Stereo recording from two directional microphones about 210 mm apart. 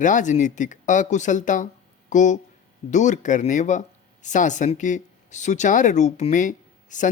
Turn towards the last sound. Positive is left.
turn(degrees=35)  # may be behind; listen again after turning